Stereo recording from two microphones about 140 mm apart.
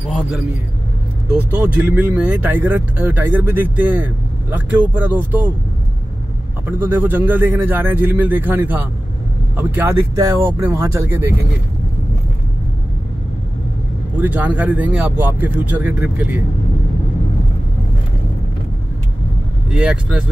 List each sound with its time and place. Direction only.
1.3 s speech: 10° right (ahead or behind)
6.8 s speech: 15° right (ahead or behind)
14.2 s speech: 10° right (ahead or behind)
19.7 s speech: 5° right (ahead or behind)